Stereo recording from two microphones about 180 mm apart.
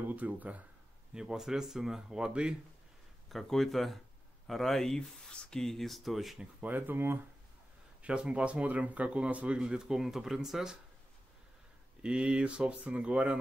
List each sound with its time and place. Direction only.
0.1 s speech: 10° right (ahead or behind)
12.0 s speech: 5° right (ahead or behind)